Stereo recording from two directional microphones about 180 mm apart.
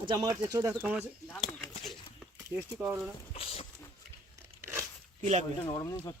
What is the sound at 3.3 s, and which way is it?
Speech, 30° left (ahead or behind).